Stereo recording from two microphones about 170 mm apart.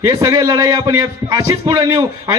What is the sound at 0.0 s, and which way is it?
A man's voice, 20° right (ahead or behind).